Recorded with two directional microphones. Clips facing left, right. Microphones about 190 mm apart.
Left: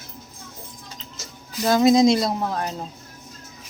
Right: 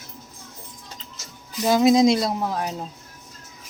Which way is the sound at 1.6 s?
5° right (ahead or behind).